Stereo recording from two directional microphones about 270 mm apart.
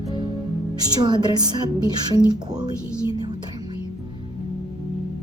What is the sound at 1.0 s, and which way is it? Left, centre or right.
Speech, centre.